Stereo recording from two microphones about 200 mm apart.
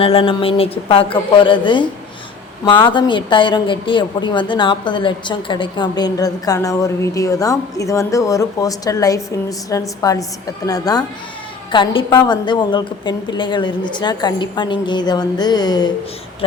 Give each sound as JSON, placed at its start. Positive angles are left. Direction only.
{"t": 0.0, "sound": "a woman's voice", "side_deg": 30}